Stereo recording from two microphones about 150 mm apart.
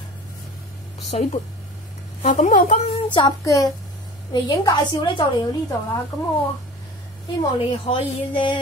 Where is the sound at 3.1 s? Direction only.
25° left (ahead or behind).